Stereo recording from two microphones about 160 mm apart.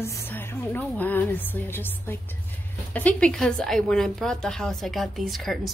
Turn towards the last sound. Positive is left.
turn(degrees=0)  # may be behind; listen again after turning